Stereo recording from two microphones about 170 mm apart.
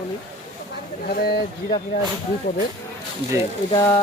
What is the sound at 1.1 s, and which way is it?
Speech, 70° left (ahead or behind).